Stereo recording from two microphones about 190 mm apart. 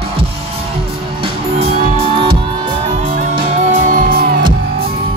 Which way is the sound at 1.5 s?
30° right (ahead or behind).